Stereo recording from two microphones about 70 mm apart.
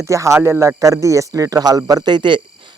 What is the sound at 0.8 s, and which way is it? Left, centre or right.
Speech, right.